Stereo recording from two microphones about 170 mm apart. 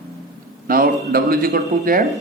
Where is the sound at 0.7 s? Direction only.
60° right (ahead or behind).